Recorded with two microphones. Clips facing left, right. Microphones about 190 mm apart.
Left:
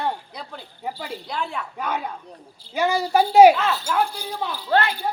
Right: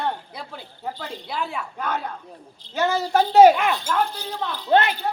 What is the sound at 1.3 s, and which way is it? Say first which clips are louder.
Speech: right 1 dB; 5° right (ahead or behind).